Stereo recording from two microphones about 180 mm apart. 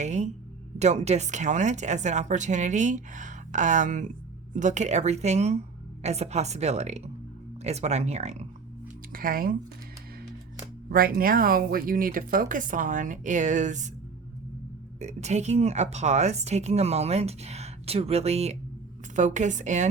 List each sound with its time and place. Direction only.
0.0 s speech: 40° right (ahead or behind)
9.1 s speech: 55° right (ahead or behind)
10.8 s speech: 55° right (ahead or behind)
14.9 s speech: 40° right (ahead or behind)